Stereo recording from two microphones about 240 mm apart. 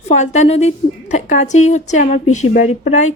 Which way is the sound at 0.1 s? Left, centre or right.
Left.